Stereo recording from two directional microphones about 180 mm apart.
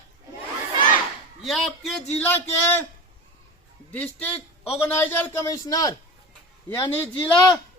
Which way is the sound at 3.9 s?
10° left (ahead or behind).